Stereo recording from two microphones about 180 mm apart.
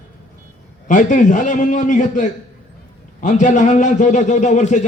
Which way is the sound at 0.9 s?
45° left (ahead or behind).